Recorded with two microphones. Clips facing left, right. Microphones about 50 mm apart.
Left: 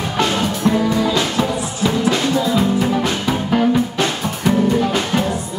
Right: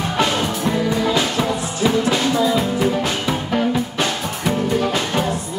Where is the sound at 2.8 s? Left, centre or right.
Centre.